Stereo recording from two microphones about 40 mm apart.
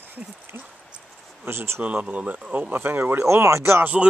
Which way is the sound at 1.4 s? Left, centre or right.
Right.